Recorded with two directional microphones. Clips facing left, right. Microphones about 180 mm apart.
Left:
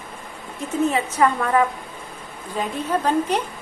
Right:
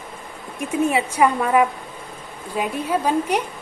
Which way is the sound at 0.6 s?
10° right (ahead or behind).